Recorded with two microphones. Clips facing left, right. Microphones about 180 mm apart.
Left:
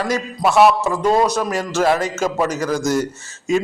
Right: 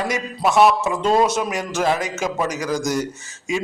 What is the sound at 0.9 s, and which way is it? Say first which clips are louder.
A man's voice: left 1 dB; 25° right (ahead or behind).